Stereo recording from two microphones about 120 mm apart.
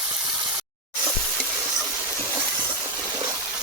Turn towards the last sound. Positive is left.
turn(degrees=-30)  # may be behind; listen again after turning